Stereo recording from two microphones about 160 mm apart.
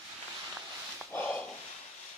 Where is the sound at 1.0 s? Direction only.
10° left (ahead or behind).